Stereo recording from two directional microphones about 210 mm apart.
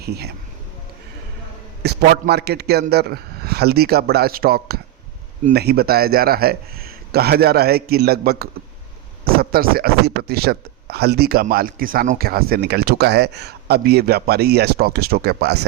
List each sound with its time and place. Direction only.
0.0 s speech: 50° right (ahead or behind)
1.8 s a man's voice: 50° right (ahead or behind)